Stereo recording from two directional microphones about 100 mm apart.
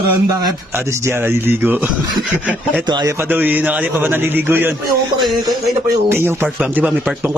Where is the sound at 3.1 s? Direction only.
20° right (ahead or behind).